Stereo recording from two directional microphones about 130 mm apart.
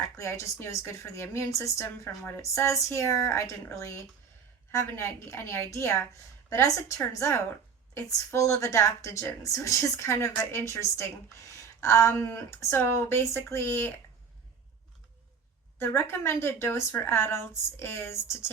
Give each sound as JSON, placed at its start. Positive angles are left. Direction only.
{"t": 0.2, "sound": "a woman's voice", "side_deg": 25}
{"t": 15.8, "sound": "a woman's voice", "side_deg": 20}